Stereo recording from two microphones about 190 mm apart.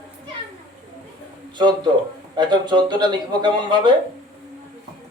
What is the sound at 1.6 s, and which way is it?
Speech, 20° right (ahead or behind).